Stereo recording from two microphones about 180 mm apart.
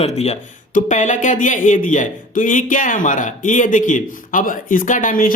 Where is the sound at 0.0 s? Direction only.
35° left (ahead or behind).